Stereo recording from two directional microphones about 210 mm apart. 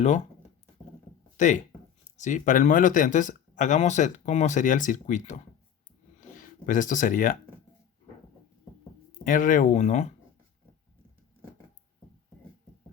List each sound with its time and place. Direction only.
1.4 s speech: 35° left (ahead or behind)
9.2 s speech: 40° left (ahead or behind)